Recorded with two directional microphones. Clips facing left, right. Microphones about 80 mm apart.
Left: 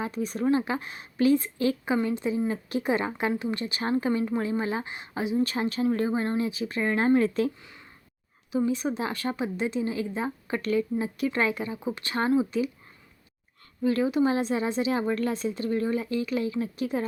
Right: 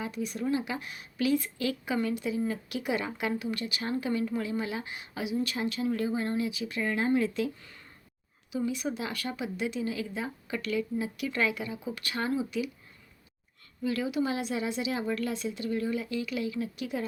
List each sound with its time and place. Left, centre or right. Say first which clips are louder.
0.0 s a woman's voice: left 5 dB; left
8.5 s a woman's voice: left 5 dB; left
13.8 s a woman's voice: left 6 dB; left